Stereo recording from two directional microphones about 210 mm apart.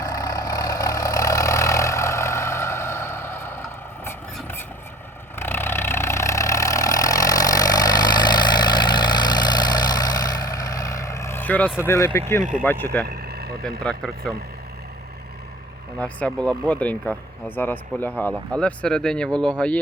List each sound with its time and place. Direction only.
0.0 s vehicle: 15° left (ahead or behind)
11.9 s speech: 10° left (ahead or behind)
12.4 s speech: 40° right (ahead or behind)
12.6 s speech: 10° left (ahead or behind)
13.1 s vehicle: 50° right (ahead or behind)
13.8 s speech: 5° left (ahead or behind)
16.0 s speech: 5° left (ahead or behind)